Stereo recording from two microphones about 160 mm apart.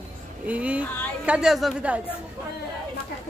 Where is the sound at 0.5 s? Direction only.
10° right (ahead or behind).